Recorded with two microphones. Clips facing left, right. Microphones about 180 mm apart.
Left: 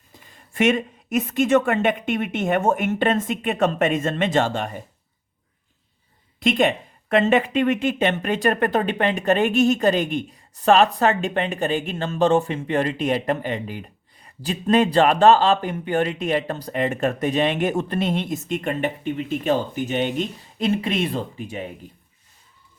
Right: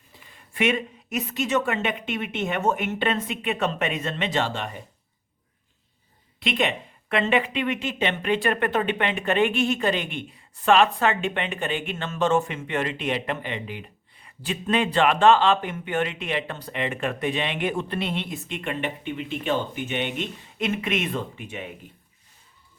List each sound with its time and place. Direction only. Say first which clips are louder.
0.1 s a woman's voice: left 2 dB; 45° left (ahead or behind)
6.4 s speech: left 6 dB; 45° left (ahead or behind)